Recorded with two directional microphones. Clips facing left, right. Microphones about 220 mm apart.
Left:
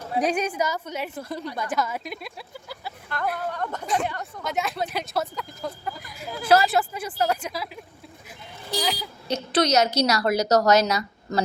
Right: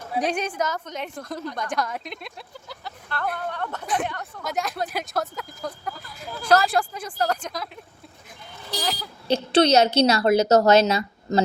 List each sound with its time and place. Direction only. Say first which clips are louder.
0.1 s a woman's voice: left 1 dB; 5° left (ahead or behind)
6.0 s a woman's voice: left 2 dB; 10° left (ahead or behind)
8.8 s speech: left 1 dB; centre (ahead or behind)
9.2 s a woman's voice: right 4 dB; 30° right (ahead or behind)